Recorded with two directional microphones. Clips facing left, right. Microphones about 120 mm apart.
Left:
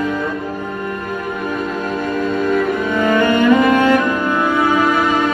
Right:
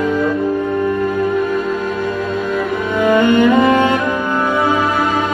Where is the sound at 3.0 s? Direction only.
15° right (ahead or behind).